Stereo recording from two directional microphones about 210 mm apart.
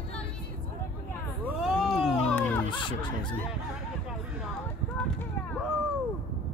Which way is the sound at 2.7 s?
25° left (ahead or behind).